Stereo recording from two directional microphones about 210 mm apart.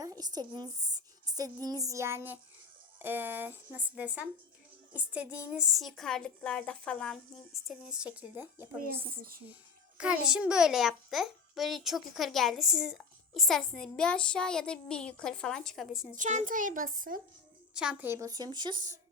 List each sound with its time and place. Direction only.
0.0 s a child's voice: 15° right (ahead or behind)
8.8 s a woman's voice: 45° right (ahead or behind)
10.0 s a child's voice: 5° right (ahead or behind)
16.1 s a child's voice: 35° right (ahead or behind)
17.7 s speech: 5° right (ahead or behind)